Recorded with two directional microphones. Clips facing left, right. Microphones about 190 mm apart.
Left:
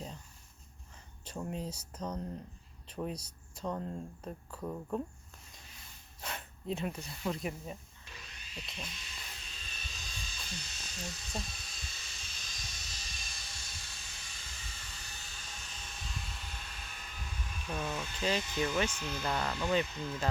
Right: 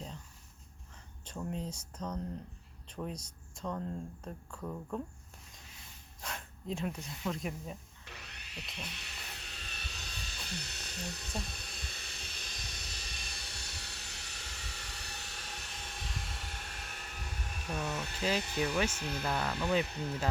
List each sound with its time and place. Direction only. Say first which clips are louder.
1.2 s speech: even; 5° left (ahead or behind)
2.8 s a sound: left 2 dB; 5° left (ahead or behind)
3.5 s speech: left 1 dB; 5° left (ahead or behind)
6.2 s a sound: left 2 dB; centre (ahead or behind)
7.3 s speech: left 1 dB; 5° left (ahead or behind)
8.0 s wood: right 2 dB; 65° right (ahead or behind)
8.7 s hiss: right 2 dB; 65° right (ahead or behind)
18.2 s speech: even; 5° right (ahead or behind)
19.8 s speech: right 1 dB; 65° right (ahead or behind)